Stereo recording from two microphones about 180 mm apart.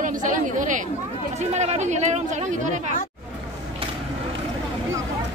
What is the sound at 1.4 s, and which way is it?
Speech, 40° right (ahead or behind).